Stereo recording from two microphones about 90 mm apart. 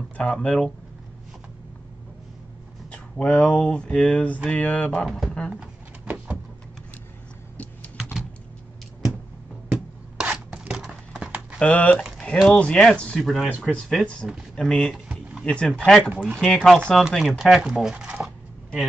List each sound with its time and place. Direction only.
0.2 s speech: 10° left (ahead or behind)
2.9 s speech: 15° left (ahead or behind)
5.0 s speech: 5° left (ahead or behind)
5.5 s drawer open or close: 15° right (ahead or behind)
7.5 s typing: 15° left (ahead or behind)
8.0 s typing: 5° right (ahead or behind)
9.7 s a sound: 10° right (ahead or behind)
11.6 s speech: 15° left (ahead or behind)
13.2 s speech: centre (ahead or behind)
15.0 s a sound: 10° right (ahead or behind)
15.4 s speech: 10° left (ahead or behind)
16.0 s speech: 10° right (ahead or behind)
16.3 s speech: 5° left (ahead or behind)